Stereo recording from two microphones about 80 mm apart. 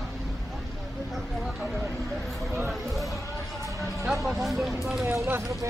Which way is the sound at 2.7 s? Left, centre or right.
Centre.